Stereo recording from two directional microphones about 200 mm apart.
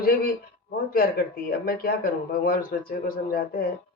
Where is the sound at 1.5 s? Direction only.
45° left (ahead or behind).